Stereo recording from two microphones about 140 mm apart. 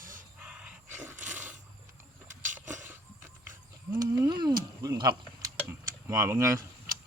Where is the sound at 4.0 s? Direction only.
25° right (ahead or behind).